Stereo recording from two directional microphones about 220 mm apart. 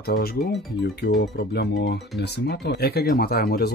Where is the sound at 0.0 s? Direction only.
45° left (ahead or behind).